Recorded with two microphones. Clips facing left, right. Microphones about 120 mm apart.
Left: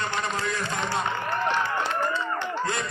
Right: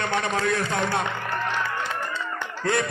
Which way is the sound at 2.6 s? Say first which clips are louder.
Right 5 dB; 60° right (ahead or behind).